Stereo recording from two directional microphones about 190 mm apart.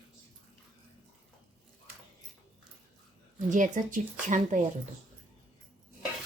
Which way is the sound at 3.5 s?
40° right (ahead or behind).